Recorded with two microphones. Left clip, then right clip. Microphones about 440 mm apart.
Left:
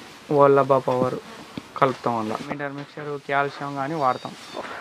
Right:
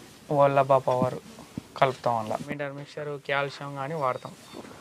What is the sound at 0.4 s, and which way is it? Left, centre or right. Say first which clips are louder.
Speech: left 4 dB; right.